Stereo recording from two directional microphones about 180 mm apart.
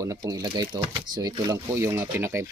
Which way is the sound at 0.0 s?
20° right (ahead or behind).